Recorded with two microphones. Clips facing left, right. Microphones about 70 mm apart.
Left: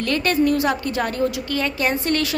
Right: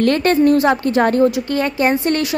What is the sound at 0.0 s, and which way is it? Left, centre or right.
A woman's voice, right.